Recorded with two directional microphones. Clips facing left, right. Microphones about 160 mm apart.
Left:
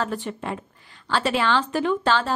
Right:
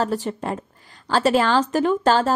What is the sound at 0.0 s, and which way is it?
Speech, 40° right (ahead or behind).